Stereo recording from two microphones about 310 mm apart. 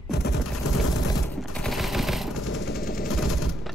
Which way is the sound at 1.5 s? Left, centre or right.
Centre.